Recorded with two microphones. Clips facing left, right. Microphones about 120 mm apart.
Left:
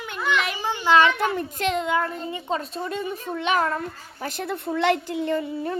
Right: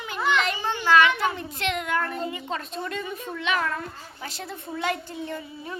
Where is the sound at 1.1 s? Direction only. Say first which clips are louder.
Left 3 dB; 45° left (ahead or behind).